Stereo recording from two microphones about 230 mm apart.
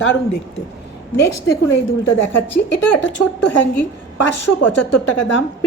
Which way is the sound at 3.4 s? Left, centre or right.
Left.